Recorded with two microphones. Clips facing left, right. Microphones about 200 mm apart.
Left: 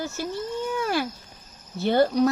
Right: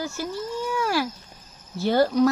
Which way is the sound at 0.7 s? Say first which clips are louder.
Right 2 dB; 25° left (ahead or behind).